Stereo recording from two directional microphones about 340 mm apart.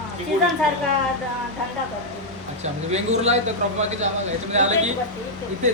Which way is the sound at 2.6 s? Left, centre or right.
Centre.